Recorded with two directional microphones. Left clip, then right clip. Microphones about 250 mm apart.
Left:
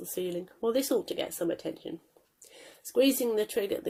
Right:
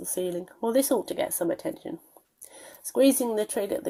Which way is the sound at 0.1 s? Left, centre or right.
Centre.